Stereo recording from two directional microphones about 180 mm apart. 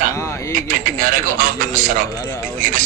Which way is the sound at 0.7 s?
50° right (ahead or behind).